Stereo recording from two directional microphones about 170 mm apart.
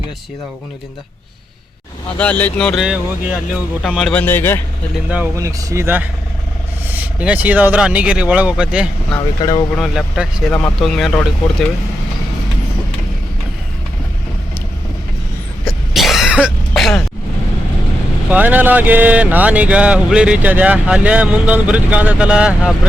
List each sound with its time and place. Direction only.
2.1 s speech: 10° left (ahead or behind)
5.1 s speech: 15° right (ahead or behind)
9.4 s speech: 25° left (ahead or behind)
9.7 s speech: centre (ahead or behind)
15.6 s throat clearing: centre (ahead or behind)
18.3 s speech: 10° right (ahead or behind)